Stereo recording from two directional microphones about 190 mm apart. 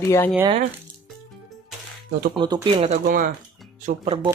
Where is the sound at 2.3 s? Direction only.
25° right (ahead or behind); by 3.3 s 45° right (ahead or behind).